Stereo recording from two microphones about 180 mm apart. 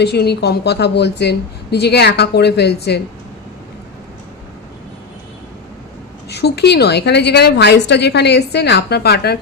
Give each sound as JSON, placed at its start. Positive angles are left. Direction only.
{"t": 0.0, "sound": "a woman's voice", "side_deg": 65}
{"t": 6.2, "sound": "a woman's voice", "side_deg": 65}